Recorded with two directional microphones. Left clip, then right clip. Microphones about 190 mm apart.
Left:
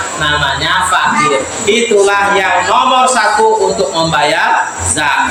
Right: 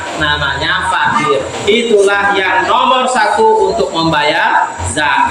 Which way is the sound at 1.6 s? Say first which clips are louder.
Even; 30° left (ahead or behind).